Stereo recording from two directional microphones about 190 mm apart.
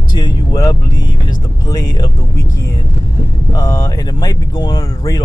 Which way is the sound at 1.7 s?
20° left (ahead or behind).